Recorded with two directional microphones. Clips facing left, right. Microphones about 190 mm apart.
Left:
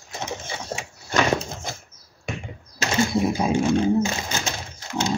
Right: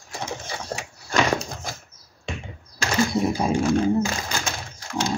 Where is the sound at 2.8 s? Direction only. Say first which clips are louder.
Even; 25° left (ahead or behind).